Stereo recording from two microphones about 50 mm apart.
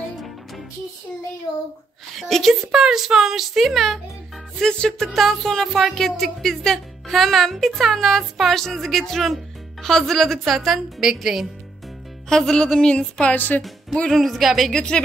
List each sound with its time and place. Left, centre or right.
2.1 s speech: centre
2.7 s speech: centre
4.6 s speech: centre
11.0 s speech: centre
12.3 s speech: centre
14.1 s speech: centre
14.7 s speech: centre